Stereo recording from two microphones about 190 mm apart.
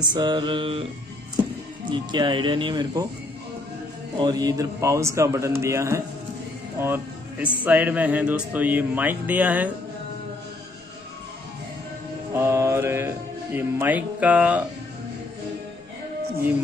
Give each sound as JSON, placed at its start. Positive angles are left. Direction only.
{"t": 0.0, "sound": "speech", "side_deg": -25}
{"t": 1.9, "sound": "speech", "side_deg": -25}
{"t": 4.2, "sound": "speech", "side_deg": -20}
{"t": 12.3, "sound": "music", "side_deg": -15}